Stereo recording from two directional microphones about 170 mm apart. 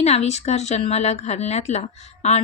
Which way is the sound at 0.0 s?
40° left (ahead or behind).